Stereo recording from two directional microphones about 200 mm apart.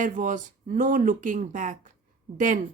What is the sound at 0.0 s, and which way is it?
Speech, 40° right (ahead or behind).